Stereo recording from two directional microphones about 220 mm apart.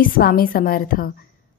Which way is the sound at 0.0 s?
40° left (ahead or behind).